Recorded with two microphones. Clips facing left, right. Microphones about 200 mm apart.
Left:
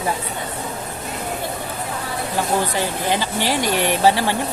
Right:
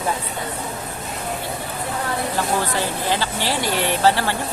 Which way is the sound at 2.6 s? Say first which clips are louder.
Left 1 dB; 15° left (ahead or behind).